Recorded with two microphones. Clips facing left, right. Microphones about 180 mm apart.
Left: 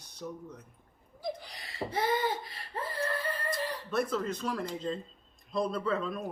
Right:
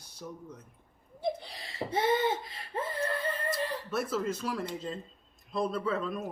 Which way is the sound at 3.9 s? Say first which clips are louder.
Left 2 dB; 5° right (ahead or behind).